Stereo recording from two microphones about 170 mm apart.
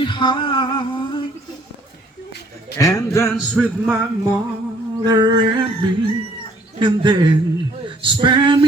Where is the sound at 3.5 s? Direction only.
5° right (ahead or behind).